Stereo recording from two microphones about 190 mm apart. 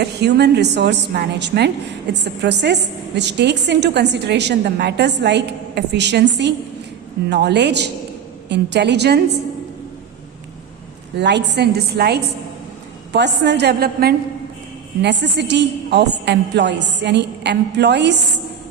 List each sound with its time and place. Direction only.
0.0 s a woman's voice: 60° right (ahead or behind)
11.2 s a woman's voice: 65° right (ahead or behind)
15.0 s a woman's voice: 65° right (ahead or behind)